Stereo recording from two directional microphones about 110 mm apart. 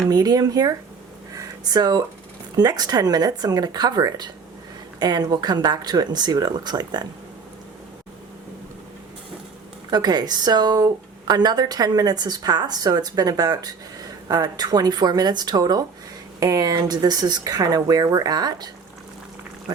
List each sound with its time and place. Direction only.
0.1 s speech: 35° right (ahead or behind)
1.4 s a sound: 35° right (ahead or behind)
2.6 s speech: 35° right (ahead or behind)
9.9 s speech: 40° right (ahead or behind)